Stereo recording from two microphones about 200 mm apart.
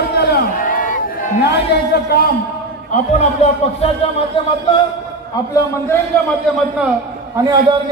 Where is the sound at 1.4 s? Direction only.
55° left (ahead or behind).